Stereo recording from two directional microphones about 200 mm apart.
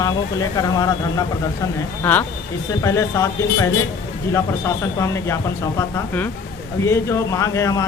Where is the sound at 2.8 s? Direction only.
15° left (ahead or behind).